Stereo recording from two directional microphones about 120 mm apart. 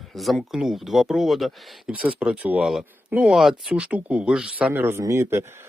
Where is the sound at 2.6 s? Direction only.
Centre (ahead or behind); by 5.7 s 20° right (ahead or behind).